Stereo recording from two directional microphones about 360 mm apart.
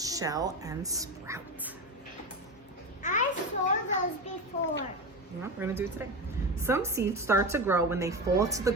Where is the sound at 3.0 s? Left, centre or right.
Left.